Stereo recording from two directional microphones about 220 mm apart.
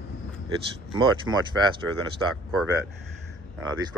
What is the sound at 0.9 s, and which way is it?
Speech, 20° right (ahead or behind).